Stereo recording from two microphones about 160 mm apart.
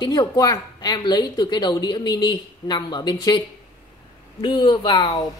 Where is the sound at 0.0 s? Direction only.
25° left (ahead or behind).